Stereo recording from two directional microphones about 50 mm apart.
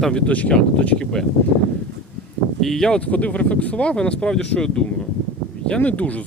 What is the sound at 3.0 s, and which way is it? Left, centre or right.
Speech, left.